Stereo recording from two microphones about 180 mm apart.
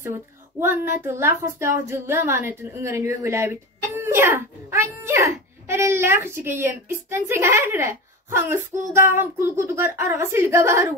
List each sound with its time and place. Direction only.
0.0 s speech: 10° right (ahead or behind)